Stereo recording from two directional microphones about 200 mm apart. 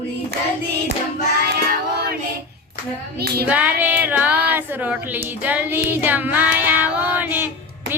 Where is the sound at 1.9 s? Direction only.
55° right (ahead or behind).